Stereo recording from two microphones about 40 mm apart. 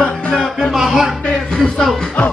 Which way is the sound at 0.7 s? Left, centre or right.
Centre.